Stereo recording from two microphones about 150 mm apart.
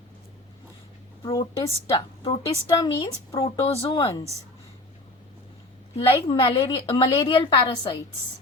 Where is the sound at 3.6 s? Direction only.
40° left (ahead or behind).